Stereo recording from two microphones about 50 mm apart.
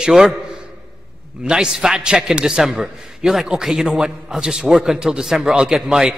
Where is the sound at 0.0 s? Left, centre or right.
Centre.